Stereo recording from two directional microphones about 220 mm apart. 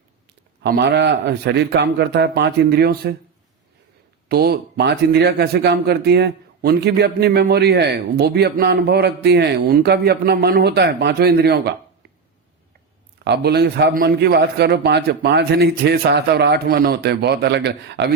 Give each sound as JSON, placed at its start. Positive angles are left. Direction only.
{"t": 0.6, "sound": "speech", "side_deg": -50}
{"t": 4.3, "sound": "speech", "side_deg": -45}
{"t": 13.2, "sound": "speech", "side_deg": -50}